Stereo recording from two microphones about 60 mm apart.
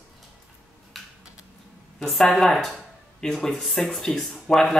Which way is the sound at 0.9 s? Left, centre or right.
Centre.